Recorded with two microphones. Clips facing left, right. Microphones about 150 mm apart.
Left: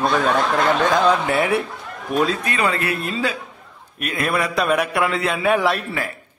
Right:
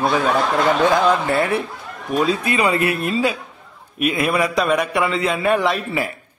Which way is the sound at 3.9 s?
5° right (ahead or behind).